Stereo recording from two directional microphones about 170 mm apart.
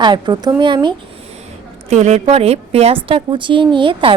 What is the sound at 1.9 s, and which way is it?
A woman's voice, 40° right (ahead or behind).